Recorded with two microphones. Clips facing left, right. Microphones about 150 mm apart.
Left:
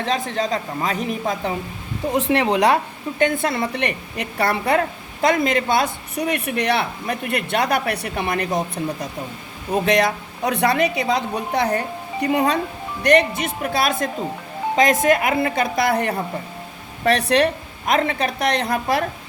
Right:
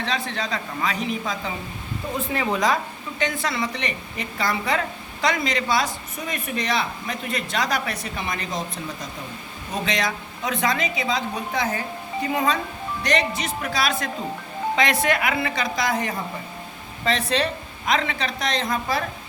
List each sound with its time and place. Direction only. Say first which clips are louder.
0.0 s a woman's voice: left 5 dB; 45° left (ahead or behind)
2.1 s a woman's voice: left 7 dB; 85° left; by 19.0 s 65° left (ahead or behind)